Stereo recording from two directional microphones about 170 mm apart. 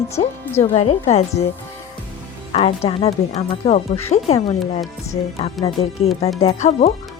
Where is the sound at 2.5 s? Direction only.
35° left (ahead or behind).